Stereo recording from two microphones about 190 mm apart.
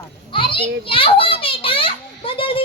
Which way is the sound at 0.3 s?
25° left (ahead or behind).